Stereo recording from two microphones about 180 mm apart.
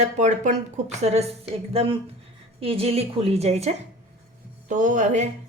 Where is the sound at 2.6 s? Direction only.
35° right (ahead or behind).